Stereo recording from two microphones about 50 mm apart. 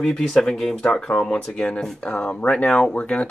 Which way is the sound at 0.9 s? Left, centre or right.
Centre.